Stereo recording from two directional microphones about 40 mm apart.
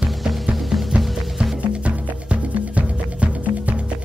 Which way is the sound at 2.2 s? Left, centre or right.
Right.